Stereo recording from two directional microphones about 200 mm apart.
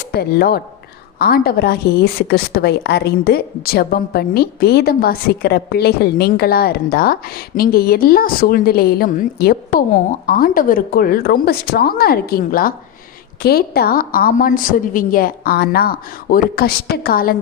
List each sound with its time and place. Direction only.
0.0 s a woman's voice: 50° left (ahead or behind)